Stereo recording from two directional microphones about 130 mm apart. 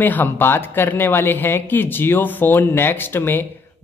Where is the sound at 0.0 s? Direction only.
15° left (ahead or behind).